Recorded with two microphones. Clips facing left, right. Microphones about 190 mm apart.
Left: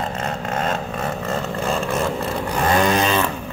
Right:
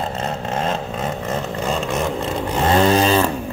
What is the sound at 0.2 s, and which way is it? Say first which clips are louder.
Vehicle: right 1 dB; 25° right (ahead or behind).